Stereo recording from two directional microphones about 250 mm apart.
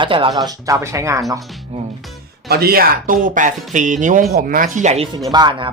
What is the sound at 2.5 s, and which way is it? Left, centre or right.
Speech, right.